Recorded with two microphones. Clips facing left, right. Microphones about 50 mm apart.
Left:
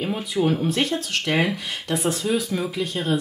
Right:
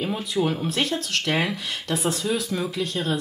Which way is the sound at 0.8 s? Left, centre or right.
Left.